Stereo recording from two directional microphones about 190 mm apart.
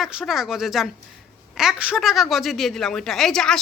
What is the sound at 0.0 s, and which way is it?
A woman's voice, 5° right (ahead or behind).